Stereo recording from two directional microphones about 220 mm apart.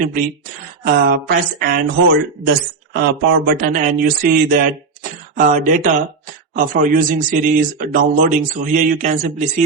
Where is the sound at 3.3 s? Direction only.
45° right (ahead or behind).